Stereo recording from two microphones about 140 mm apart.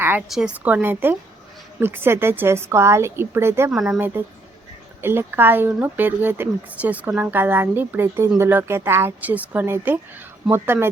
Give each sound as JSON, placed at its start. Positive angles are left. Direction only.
{"t": 0.0, "sound": "a sound", "side_deg": -15}
{"t": 0.3, "sound": "speech", "side_deg": -5}
{"t": 3.7, "sound": "speech", "side_deg": -5}
{"t": 3.9, "sound": "speech", "side_deg": -15}